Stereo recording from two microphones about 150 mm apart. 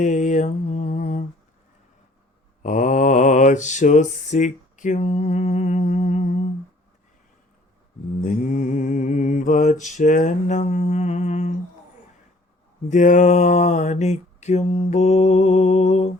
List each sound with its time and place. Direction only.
0.0 s mantra: 55° left (ahead or behind)
2.6 s mantra: 55° left (ahead or behind)
8.2 s mantra: 60° left (ahead or behind)
12.9 s mantra: 55° left (ahead or behind)